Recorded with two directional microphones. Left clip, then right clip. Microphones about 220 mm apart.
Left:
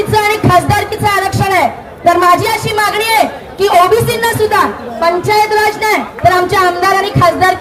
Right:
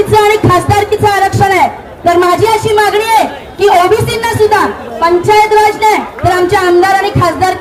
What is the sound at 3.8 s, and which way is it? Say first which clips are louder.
Speech: even; 25° left (ahead or behind).